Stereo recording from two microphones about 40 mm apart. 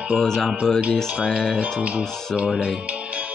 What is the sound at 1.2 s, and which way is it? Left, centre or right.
Speech, centre.